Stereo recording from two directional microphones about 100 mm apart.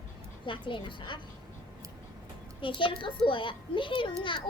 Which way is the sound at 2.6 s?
55° left (ahead or behind).